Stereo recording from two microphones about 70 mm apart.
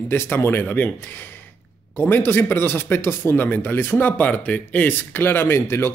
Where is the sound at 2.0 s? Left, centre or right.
Left.